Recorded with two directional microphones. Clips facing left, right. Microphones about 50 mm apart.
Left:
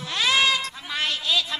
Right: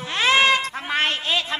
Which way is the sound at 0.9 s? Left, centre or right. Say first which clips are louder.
Right 3 dB; right.